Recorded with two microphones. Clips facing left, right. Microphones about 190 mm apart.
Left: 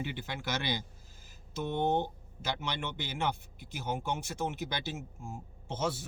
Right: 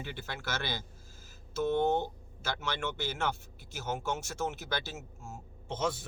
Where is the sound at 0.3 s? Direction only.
15° left (ahead or behind).